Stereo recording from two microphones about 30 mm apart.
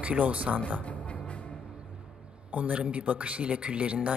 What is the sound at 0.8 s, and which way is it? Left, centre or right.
Music, left.